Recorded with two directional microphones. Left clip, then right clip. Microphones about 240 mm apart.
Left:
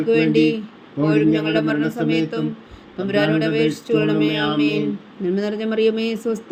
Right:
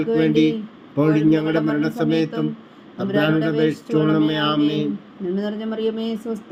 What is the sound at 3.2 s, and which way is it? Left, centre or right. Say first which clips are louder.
Speech: left 1 dB; left.